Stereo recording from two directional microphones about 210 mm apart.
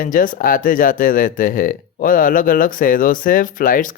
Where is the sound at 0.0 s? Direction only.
40° left (ahead or behind).